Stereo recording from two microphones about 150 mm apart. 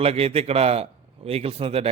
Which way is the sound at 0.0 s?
40° right (ahead or behind).